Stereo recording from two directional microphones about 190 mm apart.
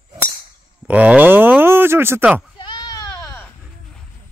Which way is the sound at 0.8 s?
5° right (ahead or behind).